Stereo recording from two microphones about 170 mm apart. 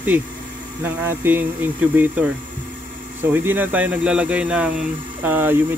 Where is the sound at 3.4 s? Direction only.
10° right (ahead or behind).